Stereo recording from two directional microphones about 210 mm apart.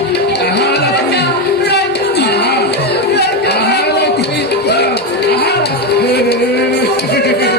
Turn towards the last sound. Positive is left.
turn(degrees=50)  # may be behind; listen again after turning